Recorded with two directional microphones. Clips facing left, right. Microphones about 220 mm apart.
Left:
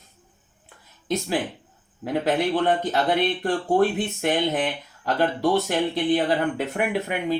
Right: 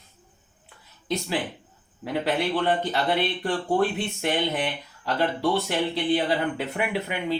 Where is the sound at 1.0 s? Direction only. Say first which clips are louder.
Left 3 dB; 50° left (ahead or behind).